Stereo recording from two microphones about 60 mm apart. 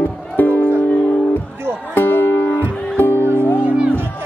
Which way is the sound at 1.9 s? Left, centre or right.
Left.